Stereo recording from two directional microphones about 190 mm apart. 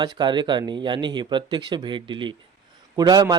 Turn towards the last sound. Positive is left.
turn(degrees=-20)  # may be behind; listen again after turning